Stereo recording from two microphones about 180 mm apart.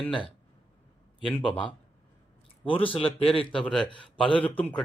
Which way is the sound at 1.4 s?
25° left (ahead or behind).